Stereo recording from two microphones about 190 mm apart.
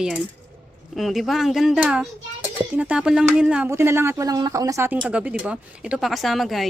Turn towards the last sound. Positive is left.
turn(degrees=0)  # may be behind; listen again after turning